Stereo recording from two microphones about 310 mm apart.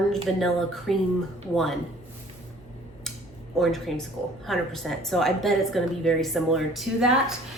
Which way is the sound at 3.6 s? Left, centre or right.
Centre.